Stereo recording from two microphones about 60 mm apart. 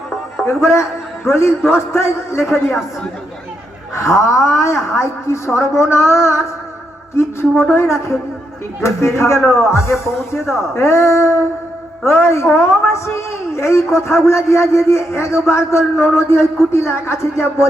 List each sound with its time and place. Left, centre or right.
0.4 s a man's voice: left
3.9 s a woman's voice: left
7.6 s a man's voice: left